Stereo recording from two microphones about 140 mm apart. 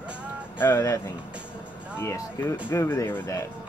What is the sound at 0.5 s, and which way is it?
Speech, 15° left (ahead or behind).